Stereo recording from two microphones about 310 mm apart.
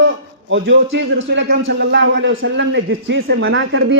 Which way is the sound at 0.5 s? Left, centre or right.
Right.